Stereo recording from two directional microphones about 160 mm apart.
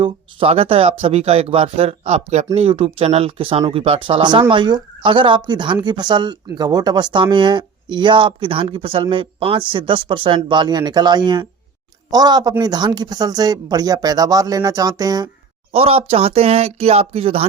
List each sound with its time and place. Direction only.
0.0 s speech: 35° right (ahead or behind)
15.7 s speech: 35° right (ahead or behind)